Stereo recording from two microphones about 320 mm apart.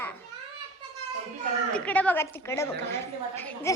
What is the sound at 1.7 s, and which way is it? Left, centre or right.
A woman's voice, centre.